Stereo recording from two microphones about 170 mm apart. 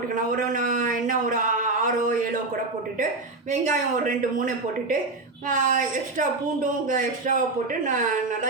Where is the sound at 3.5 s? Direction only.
50° right (ahead or behind).